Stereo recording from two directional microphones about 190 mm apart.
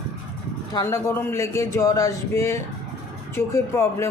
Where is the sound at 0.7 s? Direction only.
15° left (ahead or behind).